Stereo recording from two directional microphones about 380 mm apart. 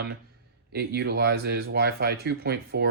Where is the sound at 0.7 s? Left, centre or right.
Right.